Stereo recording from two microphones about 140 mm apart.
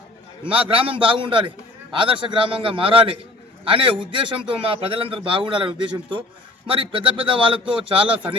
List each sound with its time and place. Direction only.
0.4 s a man's voice: 40° right (ahead or behind)